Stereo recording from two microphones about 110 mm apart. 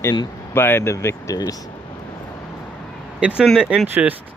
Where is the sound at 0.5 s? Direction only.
20° left (ahead or behind).